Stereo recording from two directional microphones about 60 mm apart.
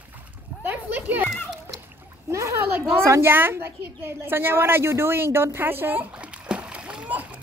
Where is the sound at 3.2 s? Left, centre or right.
Right.